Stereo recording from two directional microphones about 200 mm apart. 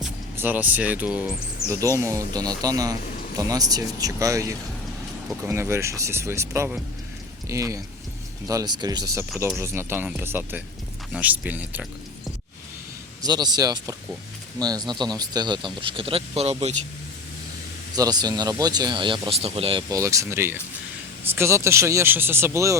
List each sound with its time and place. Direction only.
0.0 s speech: 10° right (ahead or behind)
13.2 s speech: 20° right (ahead or behind)
17.9 s speech: 20° right (ahead or behind)